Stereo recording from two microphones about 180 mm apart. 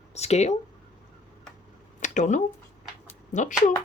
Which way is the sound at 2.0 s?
45° left (ahead or behind).